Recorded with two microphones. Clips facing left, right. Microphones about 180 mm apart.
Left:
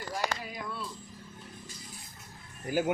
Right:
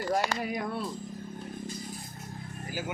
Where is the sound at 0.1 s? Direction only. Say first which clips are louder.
Right 5 dB; 55° right (ahead or behind).